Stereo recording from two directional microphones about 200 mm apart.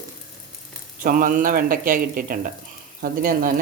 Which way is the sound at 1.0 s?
45° right (ahead or behind).